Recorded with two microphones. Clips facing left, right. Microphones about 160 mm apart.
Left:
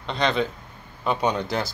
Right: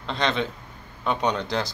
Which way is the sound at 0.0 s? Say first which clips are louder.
Left 2 dB; centre (ahead or behind).